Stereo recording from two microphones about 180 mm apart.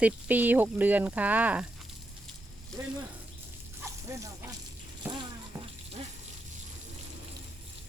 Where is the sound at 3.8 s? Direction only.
15° right (ahead or behind).